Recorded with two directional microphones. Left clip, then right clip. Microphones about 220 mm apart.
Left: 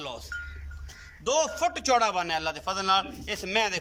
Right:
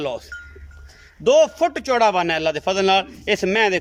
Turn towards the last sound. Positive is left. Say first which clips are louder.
# right 9 dB
turn(degrees=-40)  # may be behind; listen again after turning